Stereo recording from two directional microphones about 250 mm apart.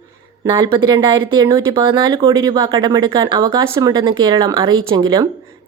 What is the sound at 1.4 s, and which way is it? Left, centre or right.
Speech, centre.